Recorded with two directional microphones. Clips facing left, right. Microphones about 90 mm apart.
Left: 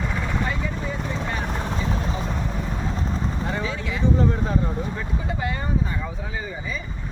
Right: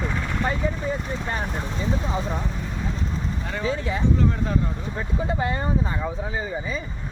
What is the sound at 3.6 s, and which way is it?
Speech, 35° right (ahead or behind).